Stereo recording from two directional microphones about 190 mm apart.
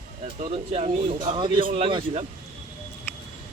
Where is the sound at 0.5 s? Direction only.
35° right (ahead or behind).